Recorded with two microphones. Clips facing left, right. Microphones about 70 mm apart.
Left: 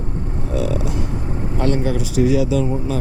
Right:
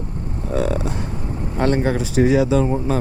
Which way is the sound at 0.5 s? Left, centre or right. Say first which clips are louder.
Right 1 dB; right.